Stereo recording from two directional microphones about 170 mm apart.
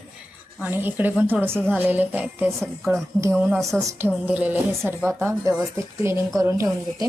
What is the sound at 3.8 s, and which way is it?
A woman's voice, 15° right (ahead or behind).